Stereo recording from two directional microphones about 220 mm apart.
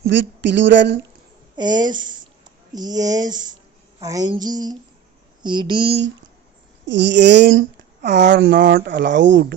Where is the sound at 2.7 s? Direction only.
20° right (ahead or behind).